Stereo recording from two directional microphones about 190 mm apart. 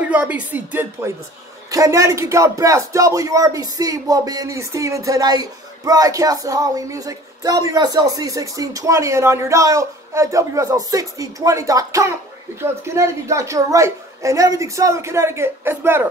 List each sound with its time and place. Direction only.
0.0 s a man's voice: 5° right (ahead or behind)